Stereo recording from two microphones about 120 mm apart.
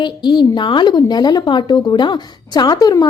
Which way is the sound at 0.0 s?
40° left (ahead or behind).